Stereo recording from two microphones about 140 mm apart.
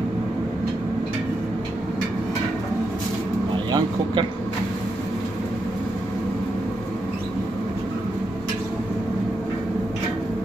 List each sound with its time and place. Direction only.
3.7 s speech: 35° right (ahead or behind)